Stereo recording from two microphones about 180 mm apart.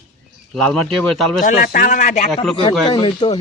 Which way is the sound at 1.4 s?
50° left (ahead or behind).